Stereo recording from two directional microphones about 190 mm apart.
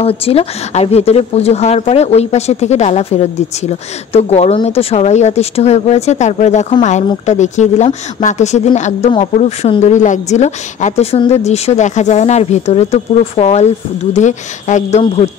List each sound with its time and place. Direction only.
0.0 s a woman's voice: 30° left (ahead or behind)